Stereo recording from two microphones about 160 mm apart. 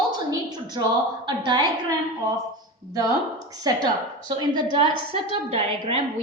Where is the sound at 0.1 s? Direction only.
25° right (ahead or behind).